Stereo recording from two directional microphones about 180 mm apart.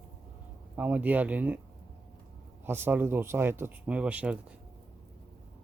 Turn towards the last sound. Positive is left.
turn(degrees=-5)  # may be behind; listen again after turning